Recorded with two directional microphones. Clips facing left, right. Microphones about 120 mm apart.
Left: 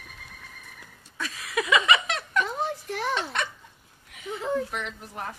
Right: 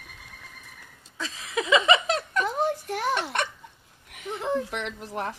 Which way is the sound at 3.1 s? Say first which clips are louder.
Right 2 dB; 60° right (ahead or behind).